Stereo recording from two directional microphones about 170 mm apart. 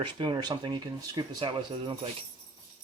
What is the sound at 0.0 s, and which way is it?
Speech, 25° right (ahead or behind).